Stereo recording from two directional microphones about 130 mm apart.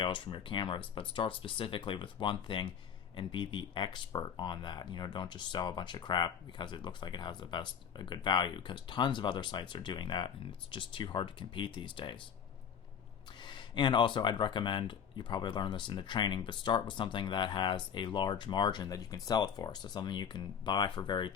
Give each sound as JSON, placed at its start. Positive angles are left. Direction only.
{"t": 0.0, "sound": "speech", "side_deg": 40}
{"t": 13.4, "sound": "speech", "side_deg": 35}